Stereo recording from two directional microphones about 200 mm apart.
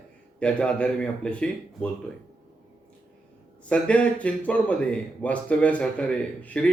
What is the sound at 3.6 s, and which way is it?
Speech, 5° left (ahead or behind).